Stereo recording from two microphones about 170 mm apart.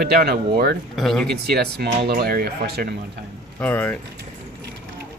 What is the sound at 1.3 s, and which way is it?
Speech, 70° right (ahead or behind).